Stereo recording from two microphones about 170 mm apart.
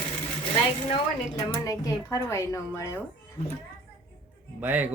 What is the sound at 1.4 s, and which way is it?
Speech, 20° left (ahead or behind).